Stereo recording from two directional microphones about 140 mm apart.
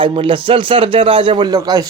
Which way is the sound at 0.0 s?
40° right (ahead or behind).